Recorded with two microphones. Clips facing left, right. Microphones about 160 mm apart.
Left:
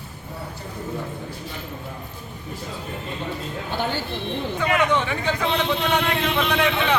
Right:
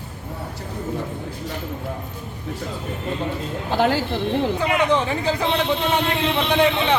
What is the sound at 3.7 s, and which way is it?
Speech, 90° right.